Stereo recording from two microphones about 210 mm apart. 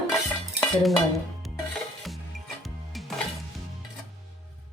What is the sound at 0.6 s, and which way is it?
Dishes, centre (ahead or behind).